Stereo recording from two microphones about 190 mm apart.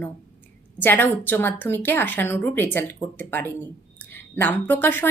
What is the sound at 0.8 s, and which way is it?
A woman's voice, 10° left (ahead or behind).